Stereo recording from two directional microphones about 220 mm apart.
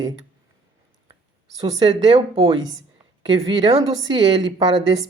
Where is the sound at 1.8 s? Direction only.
20° right (ahead or behind).